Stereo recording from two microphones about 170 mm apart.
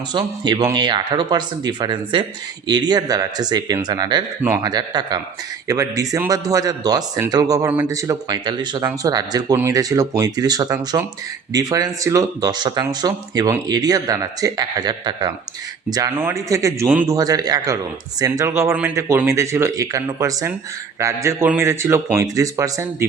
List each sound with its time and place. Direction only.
0.1 s speech: 25° right (ahead or behind)